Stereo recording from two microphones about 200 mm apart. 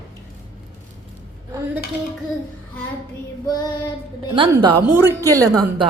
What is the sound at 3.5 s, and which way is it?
Child singing, 20° left (ahead or behind).